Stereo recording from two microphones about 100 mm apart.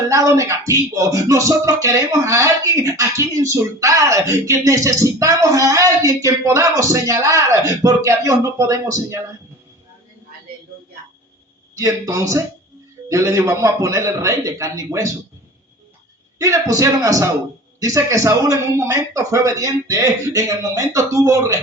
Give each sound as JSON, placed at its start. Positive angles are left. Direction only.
{"t": 0.1, "sound": "music", "side_deg": -30}
{"t": 11.7, "sound": "music", "side_deg": -35}
{"t": 16.4, "sound": "music", "side_deg": -35}